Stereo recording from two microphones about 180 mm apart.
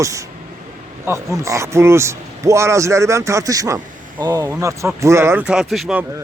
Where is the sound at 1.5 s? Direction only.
15° right (ahead or behind).